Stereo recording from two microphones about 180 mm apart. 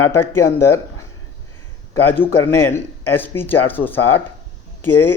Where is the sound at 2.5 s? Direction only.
15° left (ahead or behind).